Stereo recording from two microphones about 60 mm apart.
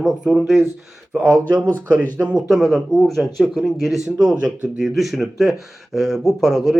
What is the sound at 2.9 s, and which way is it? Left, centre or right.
Speech, centre.